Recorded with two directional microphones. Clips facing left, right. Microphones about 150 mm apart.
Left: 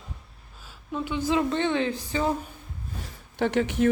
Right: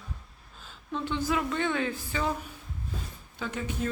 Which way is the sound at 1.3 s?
25° left (ahead or behind).